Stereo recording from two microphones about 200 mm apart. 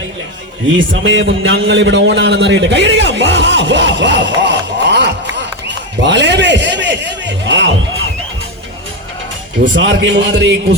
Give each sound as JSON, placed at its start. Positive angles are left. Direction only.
{"t": 0.8, "sound": "a man's voice", "side_deg": -70}
{"t": 4.4, "sound": "a sound", "side_deg": -60}
{"t": 9.7, "sound": "a man's voice", "side_deg": -65}